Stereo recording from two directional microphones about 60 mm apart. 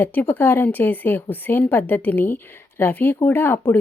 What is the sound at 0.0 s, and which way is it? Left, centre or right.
A woman's voice, left.